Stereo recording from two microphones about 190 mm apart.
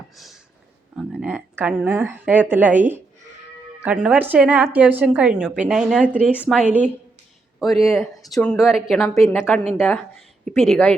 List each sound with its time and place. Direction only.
0.9 s a woman's voice: 5° right (ahead or behind)